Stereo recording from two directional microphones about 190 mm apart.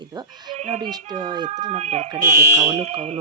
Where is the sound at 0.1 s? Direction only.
20° right (ahead or behind).